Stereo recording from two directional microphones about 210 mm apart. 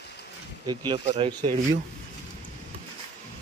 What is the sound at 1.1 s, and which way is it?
Speech, 25° right (ahead or behind).